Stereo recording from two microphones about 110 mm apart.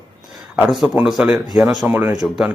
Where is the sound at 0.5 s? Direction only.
5° right (ahead or behind).